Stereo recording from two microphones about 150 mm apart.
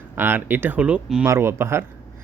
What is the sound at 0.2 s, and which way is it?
Speech, 15° right (ahead or behind).